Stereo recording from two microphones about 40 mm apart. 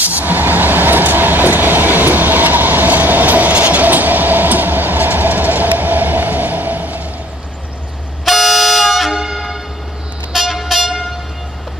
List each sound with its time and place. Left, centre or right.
0.0 s train: right
8.3 s vehicle: centre